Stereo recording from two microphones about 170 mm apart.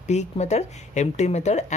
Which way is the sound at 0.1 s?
40° left (ahead or behind).